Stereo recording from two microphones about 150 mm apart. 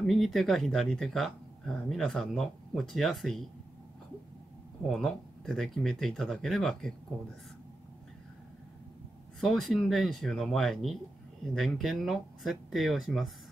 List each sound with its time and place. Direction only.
0.0 s speech: centre (ahead or behind)
4.8 s speech: centre (ahead or behind)
9.4 s speech: centre (ahead or behind)